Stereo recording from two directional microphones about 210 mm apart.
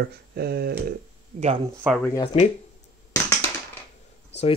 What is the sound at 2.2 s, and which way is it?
Speech, 25° left (ahead or behind).